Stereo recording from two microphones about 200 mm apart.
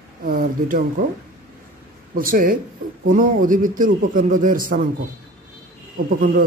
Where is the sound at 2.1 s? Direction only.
45° right (ahead or behind).